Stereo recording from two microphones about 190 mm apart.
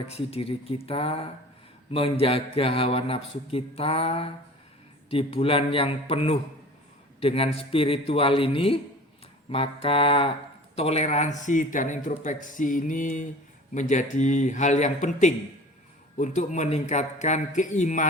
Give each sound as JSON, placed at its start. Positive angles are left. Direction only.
{"t": 0.1, "sound": "a man's voice", "side_deg": 30}